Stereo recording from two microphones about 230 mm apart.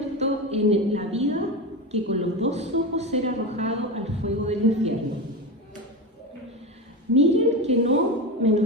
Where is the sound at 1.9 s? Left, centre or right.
Right.